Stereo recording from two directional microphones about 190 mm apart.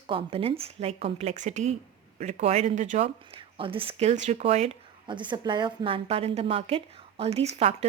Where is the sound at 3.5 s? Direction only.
30° right (ahead or behind).